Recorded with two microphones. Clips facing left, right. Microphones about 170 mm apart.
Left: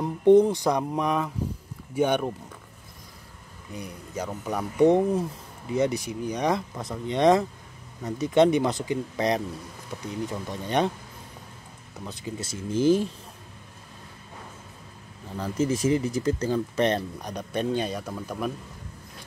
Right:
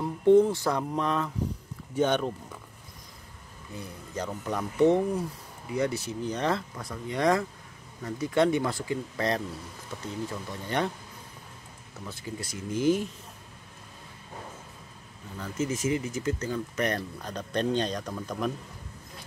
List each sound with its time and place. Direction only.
0.0 s speech: 20° left (ahead or behind)
3.7 s speech: 10° left (ahead or behind)
12.0 s speech: 20° left (ahead or behind)
15.4 s speech: 35° left (ahead or behind)
17.2 s speech: 10° left (ahead or behind)